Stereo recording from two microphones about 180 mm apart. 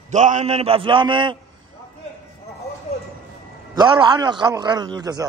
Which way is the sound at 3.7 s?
25° right (ahead or behind).